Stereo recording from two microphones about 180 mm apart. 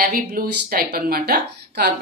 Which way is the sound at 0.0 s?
55° right (ahead or behind).